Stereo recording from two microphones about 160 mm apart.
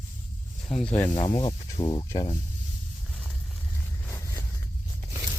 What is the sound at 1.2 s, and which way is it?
Speech, 35° left (ahead or behind).